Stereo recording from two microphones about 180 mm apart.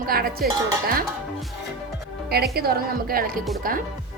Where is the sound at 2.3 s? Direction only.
60° right (ahead or behind).